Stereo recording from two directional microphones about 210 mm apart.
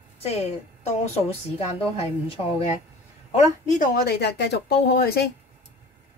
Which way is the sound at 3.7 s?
40° left (ahead or behind).